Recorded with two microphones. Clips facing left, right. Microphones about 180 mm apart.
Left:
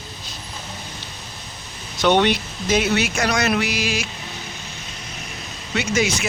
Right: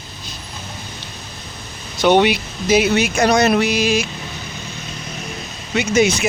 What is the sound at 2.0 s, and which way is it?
Speech, 5° right (ahead or behind).